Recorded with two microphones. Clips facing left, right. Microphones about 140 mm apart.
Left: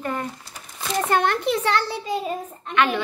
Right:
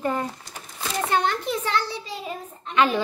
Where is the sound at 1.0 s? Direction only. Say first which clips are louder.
Left 2 dB; 50° left (ahead or behind).